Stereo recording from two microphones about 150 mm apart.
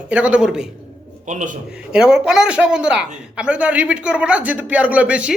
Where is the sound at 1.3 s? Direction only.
55° right (ahead or behind).